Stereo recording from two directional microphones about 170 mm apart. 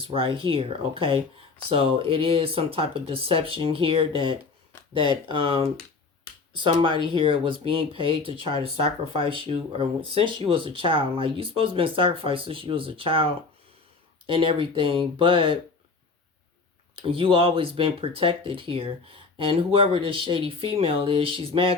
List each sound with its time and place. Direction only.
0.0 s speech: 30° right (ahead or behind)
14.3 s speech: 30° right (ahead or behind)
16.9 s speech: 30° right (ahead or behind)